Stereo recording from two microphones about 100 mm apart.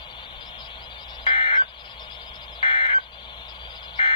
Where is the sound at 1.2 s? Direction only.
55° left (ahead or behind).